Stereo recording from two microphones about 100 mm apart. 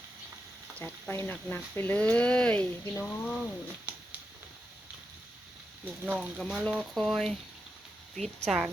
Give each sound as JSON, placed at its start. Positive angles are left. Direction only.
{"t": 1.0, "sound": "speech", "side_deg": 20}
{"t": 3.9, "sound": "a sound", "side_deg": -20}
{"t": 6.1, "sound": "speech", "side_deg": 5}
{"t": 8.4, "sound": "a woman's voice", "side_deg": -5}